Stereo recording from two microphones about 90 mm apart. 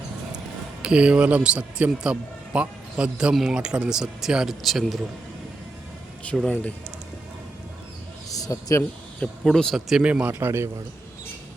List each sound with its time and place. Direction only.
0.8 s a man's voice: 10° right (ahead or behind)
6.5 s speech: 15° left (ahead or behind)
8.4 s a man's voice: 40° left (ahead or behind)
9.4 s speech: 5° left (ahead or behind)
9.9 s a man's voice: 10° right (ahead or behind)